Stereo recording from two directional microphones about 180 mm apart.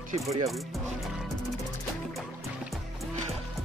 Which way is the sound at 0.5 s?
Centre (ahead or behind).